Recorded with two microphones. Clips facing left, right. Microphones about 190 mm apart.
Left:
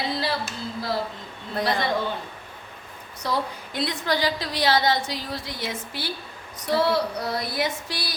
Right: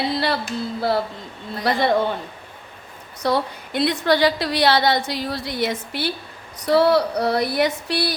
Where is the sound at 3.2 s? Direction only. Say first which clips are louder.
Right 6 dB; 70° right (ahead or behind).